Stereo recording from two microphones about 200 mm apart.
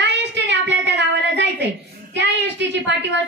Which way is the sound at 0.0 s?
60° right (ahead or behind).